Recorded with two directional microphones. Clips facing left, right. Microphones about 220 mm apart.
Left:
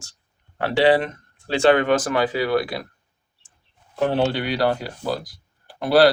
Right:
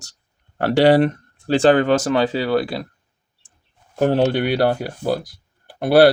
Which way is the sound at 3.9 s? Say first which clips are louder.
Right 4 dB; 45° right (ahead or behind).